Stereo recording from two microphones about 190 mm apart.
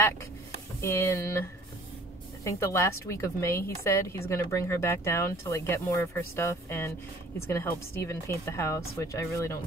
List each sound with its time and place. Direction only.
0.7 s a woman's voice: 15° left (ahead or behind)